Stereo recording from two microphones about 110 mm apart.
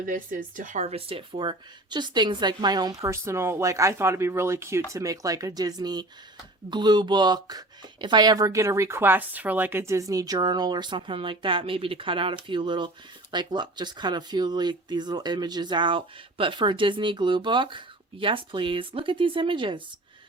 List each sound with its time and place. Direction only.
0.8 s a woman's voice: 70° right (ahead or behind); by 19.8 s 50° right (ahead or behind)